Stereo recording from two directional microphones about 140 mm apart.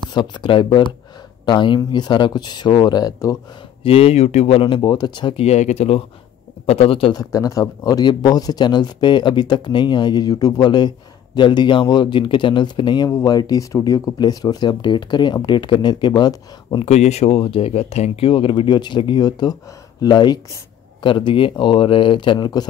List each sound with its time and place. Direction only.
0.1 s speech: 35° left (ahead or behind)
3.8 s speech: 45° left (ahead or behind)
5.4 s speech: 50° left (ahead or behind)
7.2 s speech: 25° left (ahead or behind)
16.8 s speech: 50° left (ahead or behind); by 22.7 s 30° left (ahead or behind)